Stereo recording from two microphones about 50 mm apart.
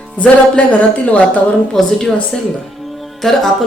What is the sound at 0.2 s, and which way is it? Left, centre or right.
Speech, left.